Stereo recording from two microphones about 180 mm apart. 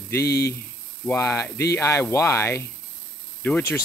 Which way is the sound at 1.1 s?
15° left (ahead or behind).